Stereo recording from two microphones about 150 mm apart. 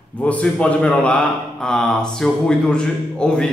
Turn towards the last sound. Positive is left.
turn(degrees=5)  # may be behind; listen again after turning